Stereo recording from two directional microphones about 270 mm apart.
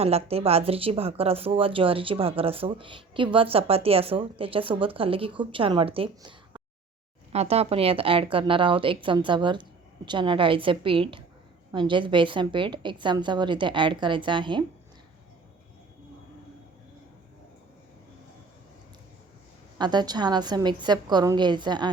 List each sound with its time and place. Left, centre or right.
0.0 s a woman's voice: right
19.8 s a woman's voice: centre